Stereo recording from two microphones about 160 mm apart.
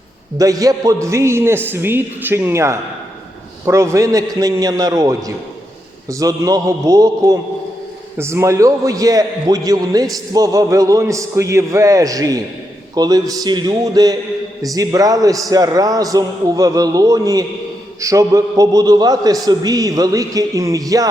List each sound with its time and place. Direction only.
0.3 s a man's voice: 20° right (ahead or behind)